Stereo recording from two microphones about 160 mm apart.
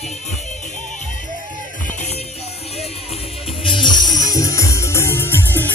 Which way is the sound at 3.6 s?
30° left (ahead or behind).